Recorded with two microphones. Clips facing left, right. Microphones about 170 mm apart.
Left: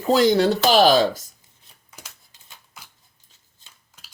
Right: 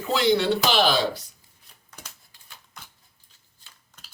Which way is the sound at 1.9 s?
10° left (ahead or behind).